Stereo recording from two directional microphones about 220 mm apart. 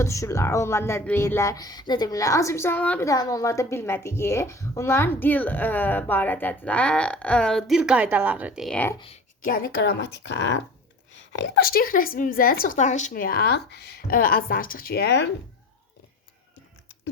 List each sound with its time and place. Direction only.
0.0 s speech: 15° left (ahead or behind)
9.0 s a woman's voice: 30° left (ahead or behind); by 15.3 s 50° left (ahead or behind)